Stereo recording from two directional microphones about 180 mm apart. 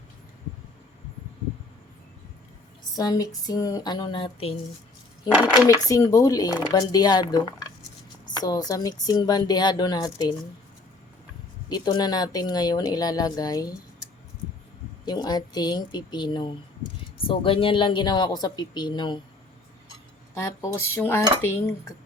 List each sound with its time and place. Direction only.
2.9 s speech: 20° left (ahead or behind)
5.5 s speech: 20° left (ahead or behind)
11.7 s speech: 25° left (ahead or behind)
15.0 s speech: 20° left (ahead or behind)
20.3 s cutlery: 15° left (ahead or behind)